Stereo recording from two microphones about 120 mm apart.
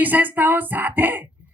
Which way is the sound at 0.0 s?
15° right (ahead or behind).